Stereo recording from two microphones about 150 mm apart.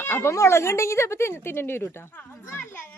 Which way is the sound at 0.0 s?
15° left (ahead or behind).